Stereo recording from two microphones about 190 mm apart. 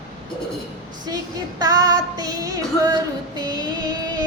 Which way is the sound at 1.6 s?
20° right (ahead or behind).